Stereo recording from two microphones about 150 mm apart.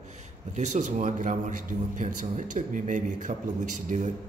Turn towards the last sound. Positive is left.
turn(degrees=-55)  # may be behind; listen again after turning